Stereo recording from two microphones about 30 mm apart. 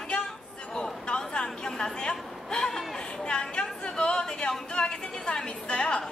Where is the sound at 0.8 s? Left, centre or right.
Left.